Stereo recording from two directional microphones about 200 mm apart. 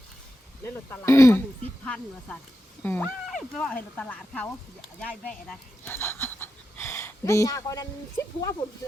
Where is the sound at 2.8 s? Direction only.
10° left (ahead or behind).